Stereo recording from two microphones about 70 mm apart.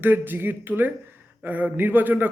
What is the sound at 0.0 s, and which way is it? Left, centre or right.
A man's voice, right.